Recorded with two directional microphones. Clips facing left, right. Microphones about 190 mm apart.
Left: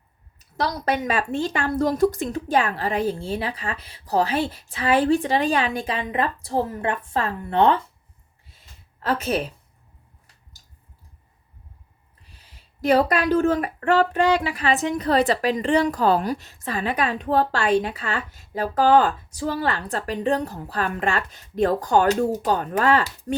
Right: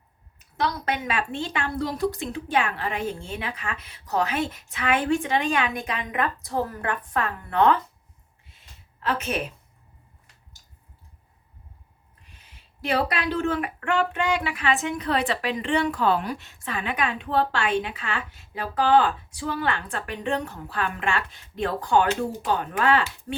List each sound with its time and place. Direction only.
0.3 s speech: 35° left (ahead or behind)
9.0 s a woman's voice: 40° left (ahead or behind)
12.2 s speech: 35° left (ahead or behind)